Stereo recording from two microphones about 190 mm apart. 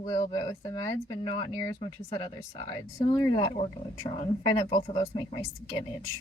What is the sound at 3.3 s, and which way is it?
Speech, 30° left (ahead or behind).